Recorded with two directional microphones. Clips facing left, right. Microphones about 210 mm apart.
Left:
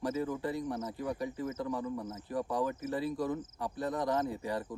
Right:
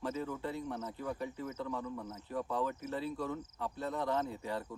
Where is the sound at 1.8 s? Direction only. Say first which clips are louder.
Left 4 dB; 20° left (ahead or behind).